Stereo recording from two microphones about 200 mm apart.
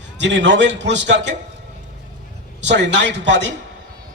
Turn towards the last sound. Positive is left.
turn(degrees=-60)  # may be behind; listen again after turning